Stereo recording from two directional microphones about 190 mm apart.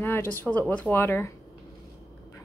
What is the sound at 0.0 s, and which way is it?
Speech, 10° left (ahead or behind).